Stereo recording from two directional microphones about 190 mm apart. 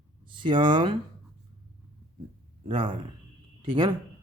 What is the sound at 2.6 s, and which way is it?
Speech, 30° right (ahead or behind).